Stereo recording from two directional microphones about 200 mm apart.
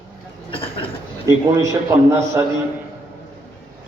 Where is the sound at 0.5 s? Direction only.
25° left (ahead or behind).